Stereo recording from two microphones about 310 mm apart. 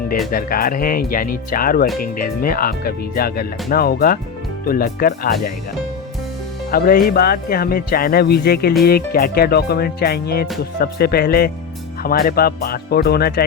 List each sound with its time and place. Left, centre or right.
0.3 s speech: left
6.7 s speech: left